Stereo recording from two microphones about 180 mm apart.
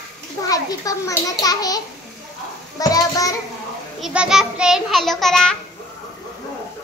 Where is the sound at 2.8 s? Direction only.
20° left (ahead or behind).